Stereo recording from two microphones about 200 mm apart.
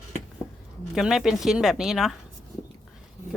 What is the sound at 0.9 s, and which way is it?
A woman's voice, centre (ahead or behind).